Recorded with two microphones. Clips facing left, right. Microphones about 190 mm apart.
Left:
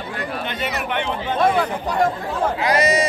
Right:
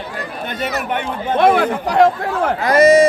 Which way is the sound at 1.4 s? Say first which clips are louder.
Right 5 dB; 75° right (ahead or behind).